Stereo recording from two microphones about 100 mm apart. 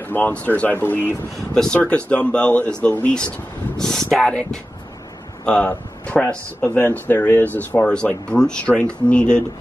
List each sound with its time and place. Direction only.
0.1 s speech: 20° left (ahead or behind)
1.5 s speech: 10° left (ahead or behind)